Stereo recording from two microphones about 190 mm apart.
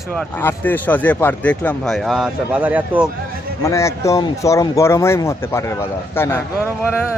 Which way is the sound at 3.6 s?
15° left (ahead or behind).